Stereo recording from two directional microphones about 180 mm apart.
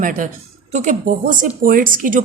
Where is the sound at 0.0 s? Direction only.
45° right (ahead or behind).